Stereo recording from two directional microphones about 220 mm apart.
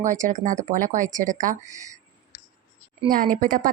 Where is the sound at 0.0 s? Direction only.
35° right (ahead or behind).